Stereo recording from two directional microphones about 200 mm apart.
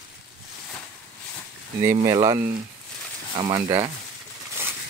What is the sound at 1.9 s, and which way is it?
Speech, 20° right (ahead or behind).